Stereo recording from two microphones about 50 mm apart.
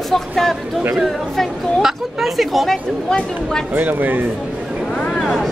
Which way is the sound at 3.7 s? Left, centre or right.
Right.